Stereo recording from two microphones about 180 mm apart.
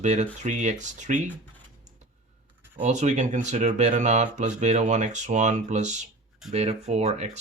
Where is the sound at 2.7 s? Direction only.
40° right (ahead or behind).